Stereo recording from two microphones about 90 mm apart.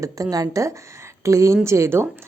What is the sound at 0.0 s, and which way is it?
A woman's voice, 40° right (ahead or behind).